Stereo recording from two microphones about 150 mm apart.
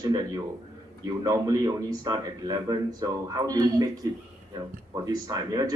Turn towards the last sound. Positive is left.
turn(degrees=-25)  # may be behind; listen again after turning